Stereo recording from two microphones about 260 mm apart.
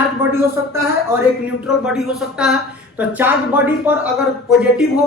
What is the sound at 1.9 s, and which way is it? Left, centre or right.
Speech, centre.